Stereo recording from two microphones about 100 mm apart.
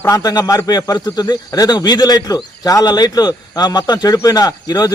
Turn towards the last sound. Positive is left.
turn(degrees=40)  # may be behind; listen again after turning